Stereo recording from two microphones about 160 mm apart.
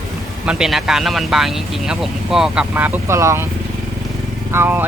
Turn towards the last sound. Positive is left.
turn(degrees=-15)  # may be behind; listen again after turning